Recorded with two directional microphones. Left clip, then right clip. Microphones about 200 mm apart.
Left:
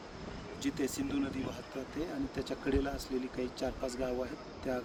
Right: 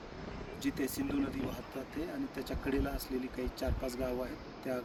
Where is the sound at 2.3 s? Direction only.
5° right (ahead or behind).